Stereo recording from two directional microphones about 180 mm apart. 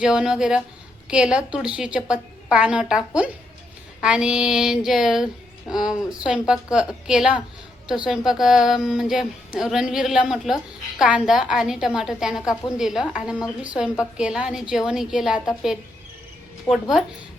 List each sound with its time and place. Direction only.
0.0 s speech: 5° right (ahead or behind)
4.0 s speech: 5° right (ahead or behind)
16.7 s a woman's voice: 20° left (ahead or behind)